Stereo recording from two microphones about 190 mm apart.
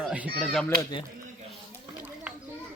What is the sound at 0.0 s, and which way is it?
Fowl, 5° right (ahead or behind).